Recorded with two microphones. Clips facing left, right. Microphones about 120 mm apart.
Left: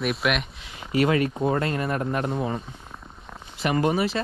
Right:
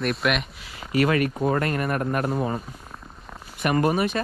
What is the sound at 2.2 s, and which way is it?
Speech, 40° right (ahead or behind).